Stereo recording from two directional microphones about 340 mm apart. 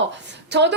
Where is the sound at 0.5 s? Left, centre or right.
Right.